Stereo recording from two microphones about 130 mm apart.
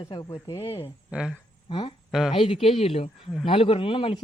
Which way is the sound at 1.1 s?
5° right (ahead or behind).